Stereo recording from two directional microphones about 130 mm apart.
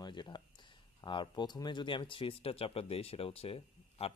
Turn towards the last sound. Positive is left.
turn(degrees=50)  # may be behind; listen again after turning